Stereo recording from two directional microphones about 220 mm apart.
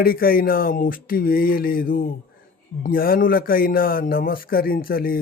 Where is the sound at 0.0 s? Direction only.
40° left (ahead or behind).